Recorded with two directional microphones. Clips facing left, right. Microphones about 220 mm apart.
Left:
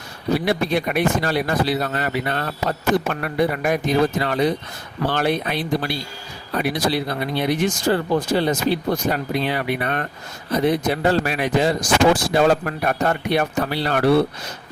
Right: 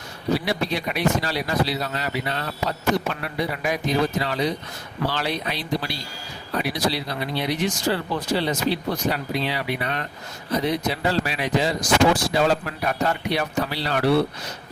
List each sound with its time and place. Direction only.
0.3 s speech: 50° left (ahead or behind)